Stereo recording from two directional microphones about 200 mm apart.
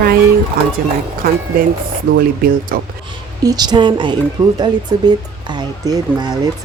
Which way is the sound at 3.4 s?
20° right (ahead or behind).